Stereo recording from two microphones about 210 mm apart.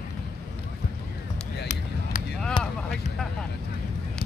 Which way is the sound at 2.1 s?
35° left (ahead or behind).